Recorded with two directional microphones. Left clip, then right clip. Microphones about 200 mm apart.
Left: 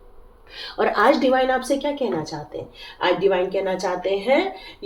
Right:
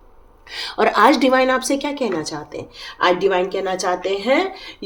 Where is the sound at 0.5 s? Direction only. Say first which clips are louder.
Right 4 dB; 45° right (ahead or behind).